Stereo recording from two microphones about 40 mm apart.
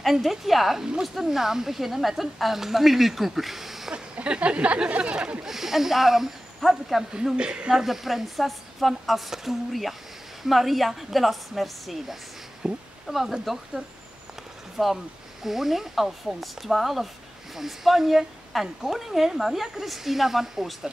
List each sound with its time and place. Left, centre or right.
0.0 s speech: centre
3.9 s speech: right
5.4 s speech: centre
7.3 s speech: right
7.7 s speech: centre
12.6 s speech: centre
13.0 s speech: centre
13.8 s speech: right
14.8 s speech: centre